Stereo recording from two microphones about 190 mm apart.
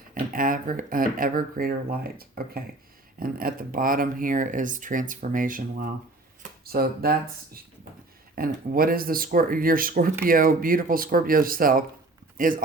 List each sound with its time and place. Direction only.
0.1 s speech: 45° right (ahead or behind)